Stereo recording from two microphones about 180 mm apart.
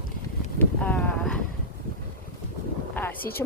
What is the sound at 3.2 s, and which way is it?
Speech, 55° left (ahead or behind).